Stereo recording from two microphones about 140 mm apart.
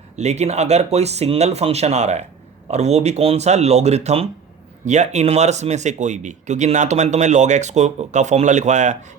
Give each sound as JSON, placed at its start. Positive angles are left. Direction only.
{"t": 0.2, "sound": "speech", "side_deg": -55}